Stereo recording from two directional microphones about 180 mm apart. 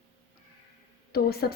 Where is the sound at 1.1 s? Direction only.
60° left (ahead or behind).